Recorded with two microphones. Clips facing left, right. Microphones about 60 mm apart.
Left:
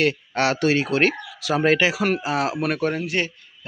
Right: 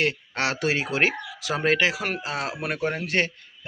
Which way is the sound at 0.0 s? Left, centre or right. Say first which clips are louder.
Left 4 dB; centre.